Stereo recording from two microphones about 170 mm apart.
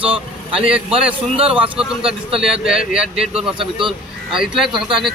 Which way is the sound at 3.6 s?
30° right (ahead or behind).